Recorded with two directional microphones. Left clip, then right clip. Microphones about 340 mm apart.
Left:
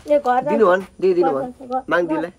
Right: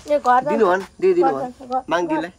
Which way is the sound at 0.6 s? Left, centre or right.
Centre.